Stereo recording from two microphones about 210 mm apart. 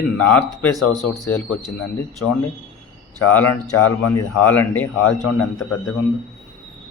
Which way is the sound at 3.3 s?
10° left (ahead or behind).